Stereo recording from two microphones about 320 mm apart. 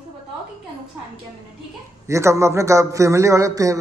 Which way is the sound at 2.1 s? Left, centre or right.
Centre.